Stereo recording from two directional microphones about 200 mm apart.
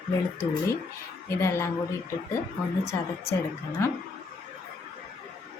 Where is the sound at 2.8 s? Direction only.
15° left (ahead or behind).